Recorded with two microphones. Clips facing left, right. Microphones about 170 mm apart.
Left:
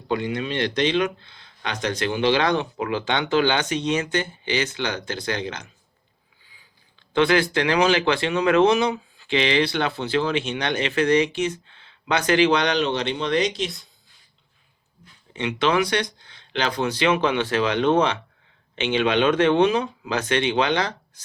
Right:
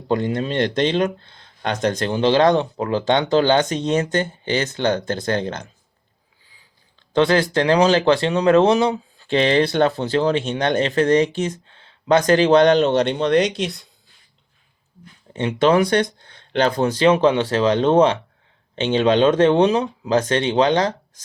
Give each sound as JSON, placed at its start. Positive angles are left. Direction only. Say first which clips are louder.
{"t": 0.1, "sound": "speech", "louder": "right 4 dB", "side_deg": -40}
{"t": 7.1, "sound": "speech", "louder": "right 2 dB", "side_deg": -40}
{"t": 15.3, "sound": "speech", "louder": "right 5 dB", "side_deg": -40}